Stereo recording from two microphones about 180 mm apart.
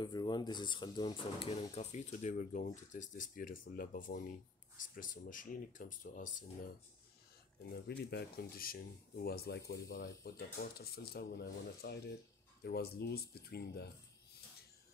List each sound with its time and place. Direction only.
0.0 s speech: 25° left (ahead or behind); by 6.3 s 45° left (ahead or behind)
8.0 s speech: 65° left (ahead or behind)